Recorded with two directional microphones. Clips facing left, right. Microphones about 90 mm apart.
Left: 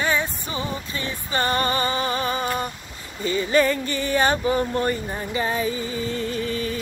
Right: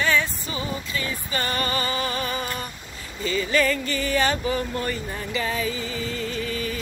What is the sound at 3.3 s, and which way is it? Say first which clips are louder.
Speech: left 3 dB; 25° left (ahead or behind).